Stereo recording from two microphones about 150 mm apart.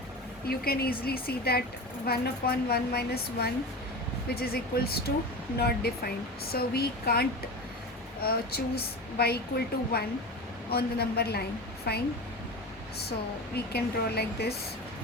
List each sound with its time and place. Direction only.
0.4 s speech: 90° left
13.7 s speech: 90° left